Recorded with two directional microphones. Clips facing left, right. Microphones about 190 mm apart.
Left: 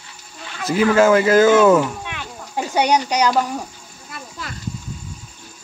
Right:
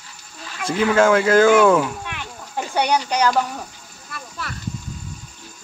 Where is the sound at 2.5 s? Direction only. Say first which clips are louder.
Left 3 dB; 15° left (ahead or behind).